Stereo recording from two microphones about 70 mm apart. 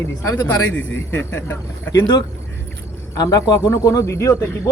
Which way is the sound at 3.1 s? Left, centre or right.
Left.